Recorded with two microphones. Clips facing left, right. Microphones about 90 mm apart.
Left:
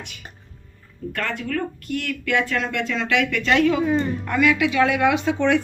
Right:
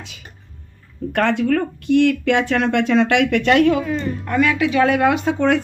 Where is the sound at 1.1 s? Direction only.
75° right (ahead or behind).